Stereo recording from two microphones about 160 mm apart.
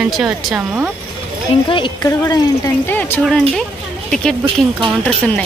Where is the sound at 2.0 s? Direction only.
15° left (ahead or behind).